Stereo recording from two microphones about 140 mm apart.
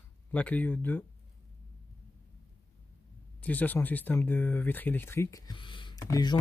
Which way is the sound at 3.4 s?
10° left (ahead or behind).